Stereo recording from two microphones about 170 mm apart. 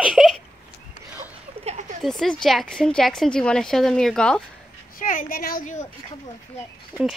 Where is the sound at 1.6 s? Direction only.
35° right (ahead or behind).